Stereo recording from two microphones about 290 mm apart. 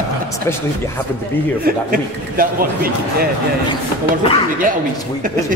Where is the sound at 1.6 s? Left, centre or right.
Right.